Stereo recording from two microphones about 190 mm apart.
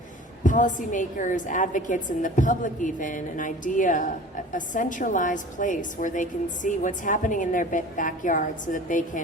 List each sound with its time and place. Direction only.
0.4 s a woman's voice: 45° left (ahead or behind)